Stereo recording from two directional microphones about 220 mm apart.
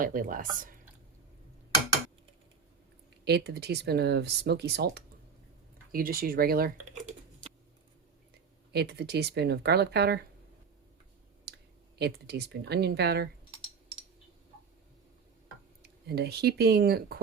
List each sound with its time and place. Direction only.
0.0 s speech: 40° right (ahead or behind)
3.2 s speech: 50° right (ahead or behind)
8.7 s speech: 50° right (ahead or behind)
11.9 s speech: 50° right (ahead or behind)
16.0 s speech: 45° right (ahead or behind)